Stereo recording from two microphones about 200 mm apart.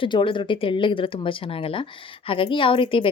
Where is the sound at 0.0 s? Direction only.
25° left (ahead or behind).